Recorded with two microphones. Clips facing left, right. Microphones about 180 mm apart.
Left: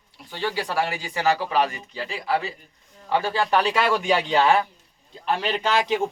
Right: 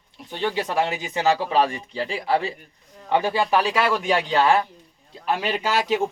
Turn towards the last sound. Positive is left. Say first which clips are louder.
# even
turn(degrees=-5)  # may be behind; listen again after turning